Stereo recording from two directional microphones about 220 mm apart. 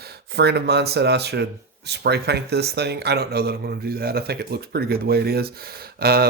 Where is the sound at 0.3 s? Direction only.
50° right (ahead or behind).